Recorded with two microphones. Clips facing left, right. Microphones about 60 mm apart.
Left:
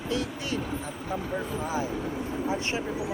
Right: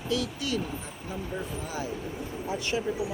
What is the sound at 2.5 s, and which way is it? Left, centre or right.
Speech, left.